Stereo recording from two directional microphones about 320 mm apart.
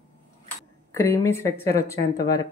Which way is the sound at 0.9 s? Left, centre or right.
Centre.